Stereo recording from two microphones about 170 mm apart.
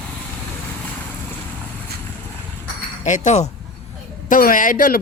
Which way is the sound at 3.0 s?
45° left (ahead or behind).